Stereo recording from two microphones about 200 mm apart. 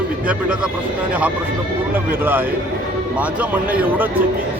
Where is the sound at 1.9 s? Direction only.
10° right (ahead or behind).